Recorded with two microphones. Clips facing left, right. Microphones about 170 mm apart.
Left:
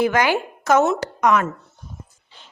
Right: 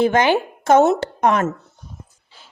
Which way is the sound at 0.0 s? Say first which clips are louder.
Right 3 dB; 25° right (ahead or behind).